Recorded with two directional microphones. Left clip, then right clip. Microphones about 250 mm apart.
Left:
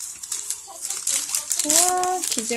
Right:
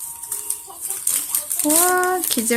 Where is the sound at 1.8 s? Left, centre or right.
Right.